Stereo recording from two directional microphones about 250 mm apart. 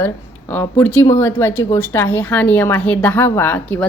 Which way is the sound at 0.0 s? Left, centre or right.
Centre.